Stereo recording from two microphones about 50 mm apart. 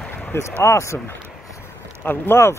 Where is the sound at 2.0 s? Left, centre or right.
Left.